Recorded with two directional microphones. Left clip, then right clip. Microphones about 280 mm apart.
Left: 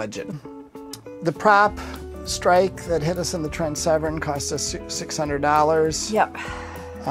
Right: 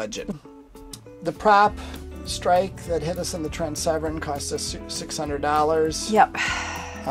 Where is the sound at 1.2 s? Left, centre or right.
Left.